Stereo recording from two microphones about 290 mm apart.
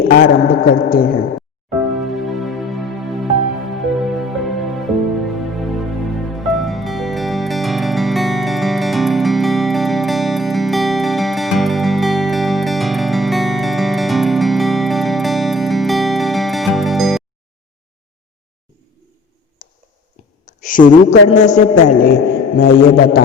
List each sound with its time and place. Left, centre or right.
0.1 s a man's voice: left
1.9 s music: centre
3.9 s music: centre
6.3 s music: centre
20.7 s a man's voice: left